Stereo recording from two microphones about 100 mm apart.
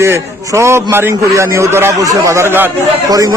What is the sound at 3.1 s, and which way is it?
Speech, 35° right (ahead or behind).